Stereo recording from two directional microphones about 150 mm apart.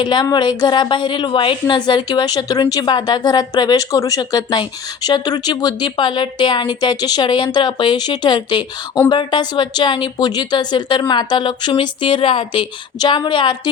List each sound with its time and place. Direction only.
0.0 s a woman's voice: 30° left (ahead or behind)